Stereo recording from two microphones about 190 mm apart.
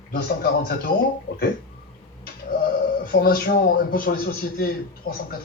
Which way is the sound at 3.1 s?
55° left (ahead or behind).